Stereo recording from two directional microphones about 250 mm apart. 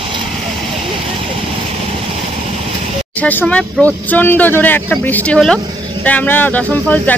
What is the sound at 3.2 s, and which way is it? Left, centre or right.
Speech, centre.